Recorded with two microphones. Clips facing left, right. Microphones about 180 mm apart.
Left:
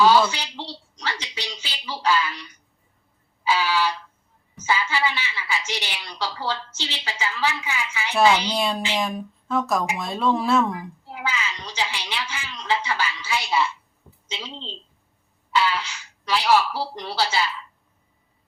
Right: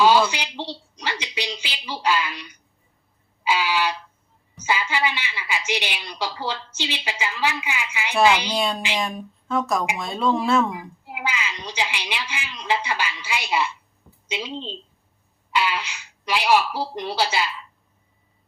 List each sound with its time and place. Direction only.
0.0 s a woman's voice: 15° right (ahead or behind)
8.5 s speech: centre (ahead or behind)
11.0 s a woman's voice: 15° right (ahead or behind)